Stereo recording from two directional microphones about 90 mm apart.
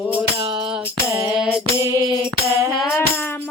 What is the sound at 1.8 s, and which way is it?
Music, 40° right (ahead or behind).